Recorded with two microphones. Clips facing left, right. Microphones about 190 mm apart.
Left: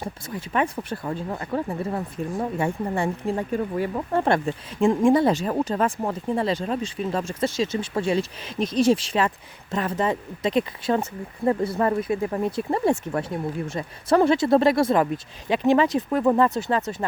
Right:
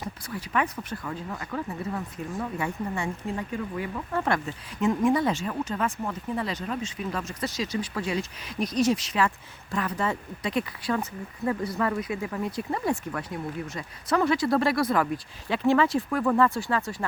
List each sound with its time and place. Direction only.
0.0 s speech: 25° left (ahead or behind)